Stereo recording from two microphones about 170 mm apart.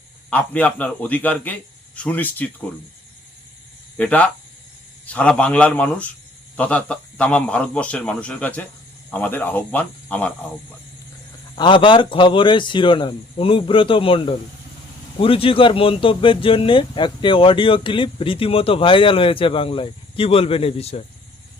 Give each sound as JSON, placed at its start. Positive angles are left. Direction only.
{"t": 0.3, "sound": "a man's voice", "side_deg": 10}
{"t": 3.9, "sound": "a man's voice", "side_deg": 10}
{"t": 11.5, "sound": "a man's voice", "side_deg": 30}